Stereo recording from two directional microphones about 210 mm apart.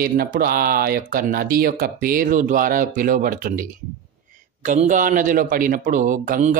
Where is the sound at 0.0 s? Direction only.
45° right (ahead or behind).